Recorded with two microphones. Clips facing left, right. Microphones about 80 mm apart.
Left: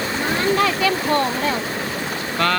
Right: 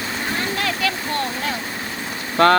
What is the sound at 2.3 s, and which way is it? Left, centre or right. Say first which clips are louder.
Speech: right 7 dB; right.